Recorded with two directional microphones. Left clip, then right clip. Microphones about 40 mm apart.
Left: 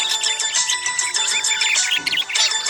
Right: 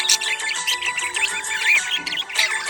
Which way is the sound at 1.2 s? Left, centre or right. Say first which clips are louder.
Left 3 dB; left.